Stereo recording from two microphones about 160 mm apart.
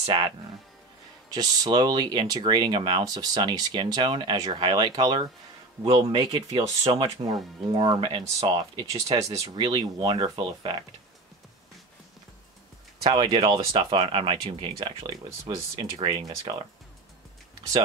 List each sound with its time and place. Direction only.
0.0 s speech: 30° right (ahead or behind)
1.3 s speech: 25° right (ahead or behind)
13.0 s speech: 30° right (ahead or behind)
15.0 s speech: 20° right (ahead or behind)